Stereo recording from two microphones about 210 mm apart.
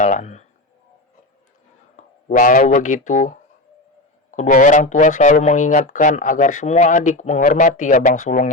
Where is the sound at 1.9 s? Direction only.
35° left (ahead or behind).